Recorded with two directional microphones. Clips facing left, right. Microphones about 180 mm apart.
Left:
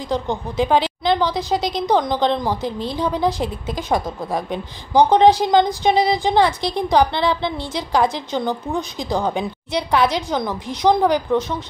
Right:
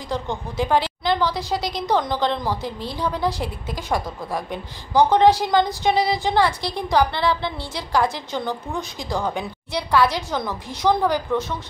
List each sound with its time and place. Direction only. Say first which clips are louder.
0.1 s a woman's voice: left 4 dB; 20° left (ahead or behind)